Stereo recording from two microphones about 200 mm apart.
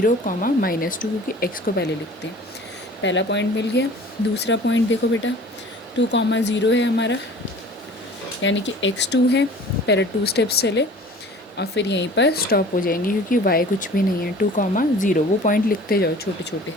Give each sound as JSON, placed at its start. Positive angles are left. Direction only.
{"t": 0.0, "sound": "speech", "side_deg": 45}
{"t": 3.0, "sound": "speech", "side_deg": 65}
{"t": 8.4, "sound": "speech", "side_deg": 70}